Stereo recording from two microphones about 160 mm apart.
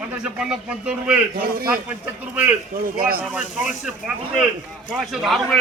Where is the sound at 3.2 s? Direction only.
5° right (ahead or behind).